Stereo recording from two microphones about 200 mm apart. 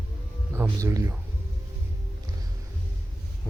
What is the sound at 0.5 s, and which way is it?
Music, 15° right (ahead or behind).